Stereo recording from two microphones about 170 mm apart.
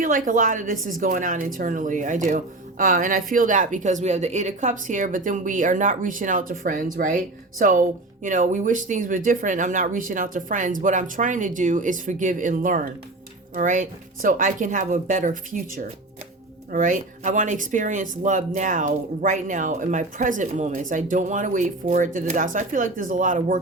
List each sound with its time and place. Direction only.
0.3 s speech: 50° right (ahead or behind)